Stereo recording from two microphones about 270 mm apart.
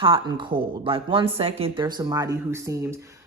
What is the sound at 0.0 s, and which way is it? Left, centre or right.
A man's voice, centre.